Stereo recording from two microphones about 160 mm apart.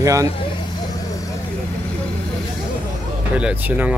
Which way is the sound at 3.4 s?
5° right (ahead or behind).